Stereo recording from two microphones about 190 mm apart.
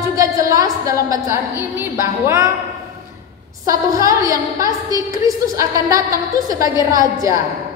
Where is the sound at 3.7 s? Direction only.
15° right (ahead or behind).